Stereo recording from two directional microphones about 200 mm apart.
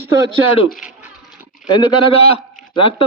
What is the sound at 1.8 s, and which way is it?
A man's voice, 25° left (ahead or behind).